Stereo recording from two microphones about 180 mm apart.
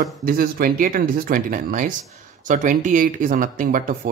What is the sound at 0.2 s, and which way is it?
A man's voice, 50° right (ahead or behind).